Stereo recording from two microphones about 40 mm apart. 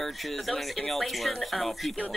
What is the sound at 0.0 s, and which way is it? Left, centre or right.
Speech, centre.